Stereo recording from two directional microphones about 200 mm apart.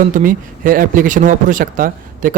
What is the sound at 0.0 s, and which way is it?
A man's voice, 40° right (ahead or behind).